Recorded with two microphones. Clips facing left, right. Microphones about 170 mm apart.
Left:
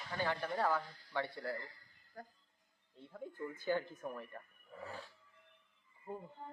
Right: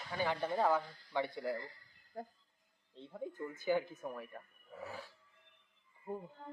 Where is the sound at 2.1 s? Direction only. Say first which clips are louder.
Right 6 dB; 25° right (ahead or behind); by 5.0 s 5° right (ahead or behind).